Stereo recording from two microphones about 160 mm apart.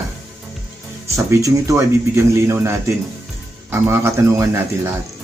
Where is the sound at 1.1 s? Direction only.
20° right (ahead or behind).